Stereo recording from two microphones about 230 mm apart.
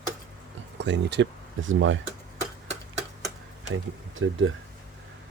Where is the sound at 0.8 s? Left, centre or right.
Right.